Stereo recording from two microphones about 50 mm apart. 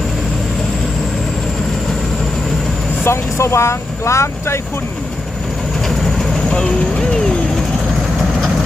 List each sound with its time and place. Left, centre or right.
3.0 s speech: left
5.8 s vehicle: centre
6.5 s a sound: left